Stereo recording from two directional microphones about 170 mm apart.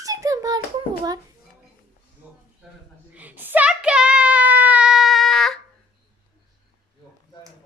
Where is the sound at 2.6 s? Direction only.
5° right (ahead or behind).